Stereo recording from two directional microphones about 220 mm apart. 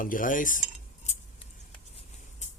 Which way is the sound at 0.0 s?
40° left (ahead or behind).